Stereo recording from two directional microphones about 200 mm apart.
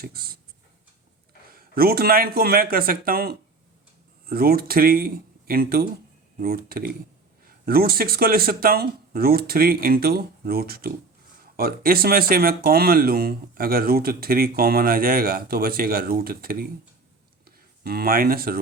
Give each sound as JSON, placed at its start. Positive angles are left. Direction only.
{"t": 0.0, "sound": "speech", "side_deg": -50}
{"t": 1.5, "sound": "speech", "side_deg": -50}